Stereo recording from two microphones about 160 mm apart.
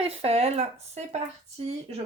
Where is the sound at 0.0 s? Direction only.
40° right (ahead or behind).